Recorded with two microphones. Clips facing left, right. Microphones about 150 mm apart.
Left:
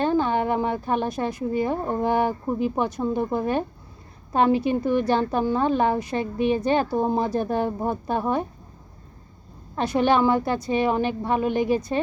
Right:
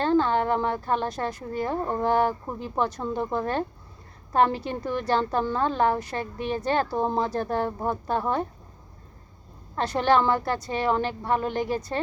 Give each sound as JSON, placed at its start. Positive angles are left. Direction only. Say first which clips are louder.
{"t": 0.0, "sound": "a woman's voice", "louder": "even", "side_deg": 15}
{"t": 9.7, "sound": "a woman's voice", "louder": "left 2 dB", "side_deg": 15}